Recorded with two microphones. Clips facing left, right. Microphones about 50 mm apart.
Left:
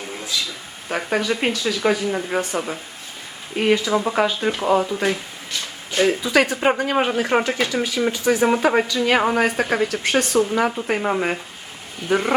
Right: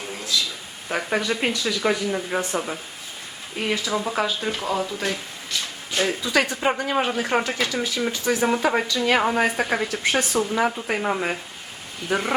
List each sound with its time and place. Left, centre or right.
0.9 s speech: centre
3.7 s speech: centre
4.6 s speech: left; by 12.3 s centre